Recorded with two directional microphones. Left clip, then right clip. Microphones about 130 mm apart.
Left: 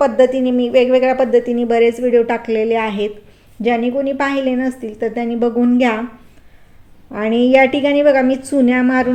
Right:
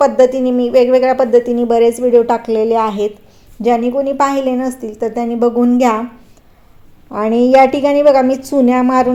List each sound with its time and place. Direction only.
0.0 s speech: 35° right (ahead or behind)
7.1 s a woman's voice: 25° right (ahead or behind)